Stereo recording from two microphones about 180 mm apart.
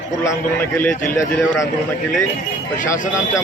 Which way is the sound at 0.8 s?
10° left (ahead or behind).